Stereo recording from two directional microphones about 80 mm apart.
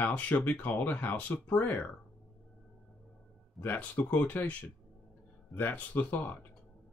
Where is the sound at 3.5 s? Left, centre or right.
Centre.